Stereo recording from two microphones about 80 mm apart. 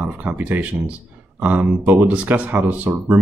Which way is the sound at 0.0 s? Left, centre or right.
Right.